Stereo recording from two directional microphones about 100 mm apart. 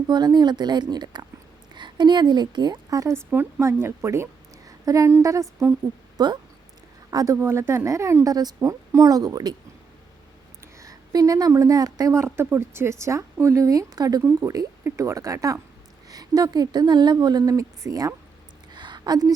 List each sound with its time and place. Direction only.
0.1 s a woman's voice: 45° right (ahead or behind)
6.1 s speech: 45° right (ahead or behind)
7.3 s speech: 25° right (ahead or behind); by 9.6 s 40° right (ahead or behind)
10.6 s a woman's voice: 30° right (ahead or behind)
14.8 s speech: 30° right (ahead or behind)
18.7 s a sound: 50° right (ahead or behind)